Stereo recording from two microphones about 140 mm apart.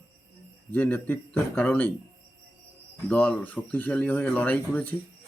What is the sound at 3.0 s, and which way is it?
Speech, 10° left (ahead or behind).